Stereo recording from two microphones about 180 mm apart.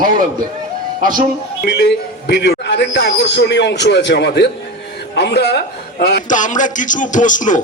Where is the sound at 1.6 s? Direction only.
65° left (ahead or behind).